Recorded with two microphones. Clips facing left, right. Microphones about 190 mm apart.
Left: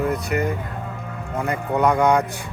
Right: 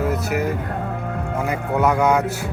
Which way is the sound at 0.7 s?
65° right (ahead or behind).